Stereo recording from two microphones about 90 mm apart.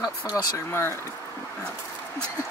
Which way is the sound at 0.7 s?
30° left (ahead or behind).